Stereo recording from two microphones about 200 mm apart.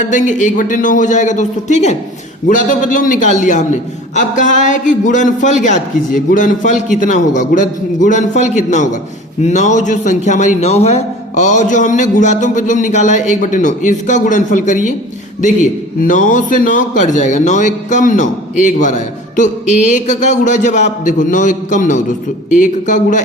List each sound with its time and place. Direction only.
0.0 s a man's voice: 40° left (ahead or behind)
16.0 s a man's voice: 40° left (ahead or behind)